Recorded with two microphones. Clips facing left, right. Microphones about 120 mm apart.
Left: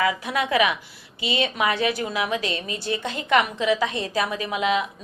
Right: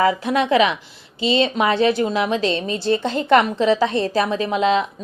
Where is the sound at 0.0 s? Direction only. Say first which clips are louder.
Right 6 dB; 35° right (ahead or behind).